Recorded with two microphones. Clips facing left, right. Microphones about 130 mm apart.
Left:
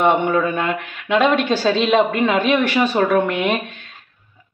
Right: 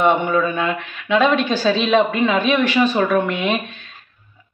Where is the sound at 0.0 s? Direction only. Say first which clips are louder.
Even; 55° left (ahead or behind).